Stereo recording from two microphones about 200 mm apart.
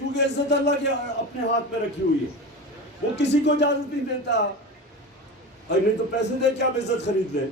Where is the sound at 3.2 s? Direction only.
60° left (ahead or behind).